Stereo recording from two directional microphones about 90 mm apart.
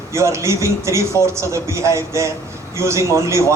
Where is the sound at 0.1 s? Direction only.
35° right (ahead or behind).